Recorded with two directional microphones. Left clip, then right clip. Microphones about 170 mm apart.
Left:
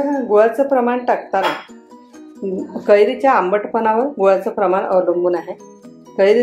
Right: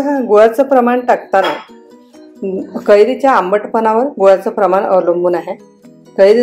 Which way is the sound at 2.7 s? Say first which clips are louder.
Right 4 dB; 25° right (ahead or behind).